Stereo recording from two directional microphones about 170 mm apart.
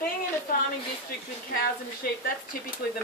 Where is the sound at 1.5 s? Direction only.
60° left (ahead or behind).